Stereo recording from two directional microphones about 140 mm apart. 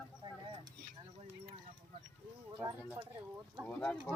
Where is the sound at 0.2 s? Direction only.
35° right (ahead or behind).